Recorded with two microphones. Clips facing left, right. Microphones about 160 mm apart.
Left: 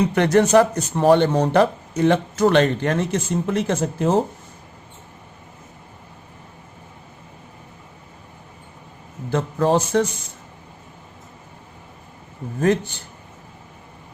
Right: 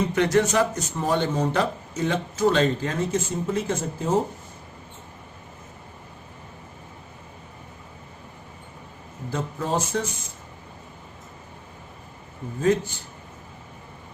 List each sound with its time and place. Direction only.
0.0 s speech: 60° left (ahead or behind); by 4.2 s 75° left (ahead or behind)
9.3 s speech: 80° left